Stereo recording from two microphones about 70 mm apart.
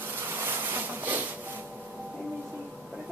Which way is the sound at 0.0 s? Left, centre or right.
Right.